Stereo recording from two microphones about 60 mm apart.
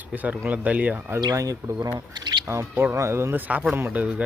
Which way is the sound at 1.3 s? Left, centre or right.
Right.